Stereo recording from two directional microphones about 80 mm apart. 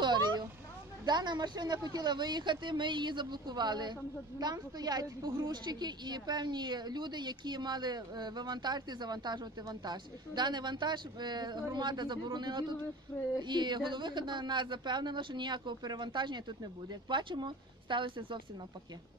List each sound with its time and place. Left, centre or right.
0.0 s a sound: right
1.0 s a woman's voice: right
17.1 s speech: right